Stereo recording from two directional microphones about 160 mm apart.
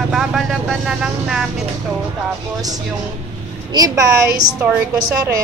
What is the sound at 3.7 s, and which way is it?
Speech, 25° right (ahead or behind).